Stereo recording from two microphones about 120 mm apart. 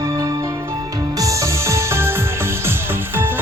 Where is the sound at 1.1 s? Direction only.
25° right (ahead or behind).